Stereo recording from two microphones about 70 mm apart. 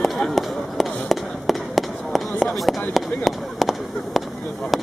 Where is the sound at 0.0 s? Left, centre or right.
Centre.